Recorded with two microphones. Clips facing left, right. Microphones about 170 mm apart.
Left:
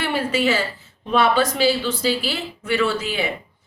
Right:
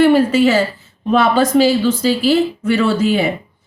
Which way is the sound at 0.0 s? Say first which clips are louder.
Right 11 dB; 45° right (ahead or behind).